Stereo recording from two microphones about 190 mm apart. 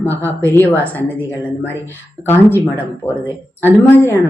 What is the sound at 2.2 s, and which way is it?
Speech, 15° right (ahead or behind).